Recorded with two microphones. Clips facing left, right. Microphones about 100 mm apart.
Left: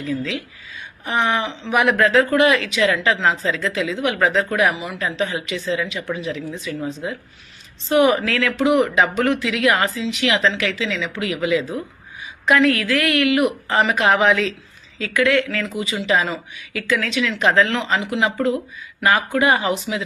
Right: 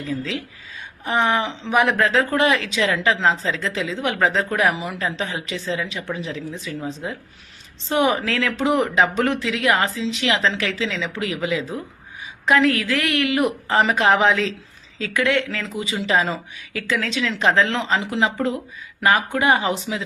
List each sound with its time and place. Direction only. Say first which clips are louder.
0.0 s speech: left 2 dB; 30° right (ahead or behind)
7.9 s speech: left 4 dB; 25° right (ahead or behind)